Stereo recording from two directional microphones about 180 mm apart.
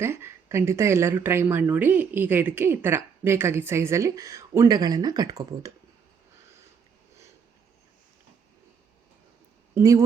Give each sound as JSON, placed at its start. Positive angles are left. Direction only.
{"t": 0.0, "sound": "speech", "side_deg": -15}
{"t": 9.7, "sound": "speech", "side_deg": -20}